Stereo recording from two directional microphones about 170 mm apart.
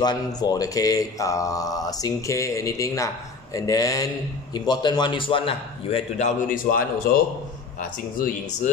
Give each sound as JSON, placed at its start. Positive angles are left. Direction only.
{"t": 0.0, "sound": "a man's voice", "side_deg": 25}
{"t": 8.2, "sound": "speech", "side_deg": 55}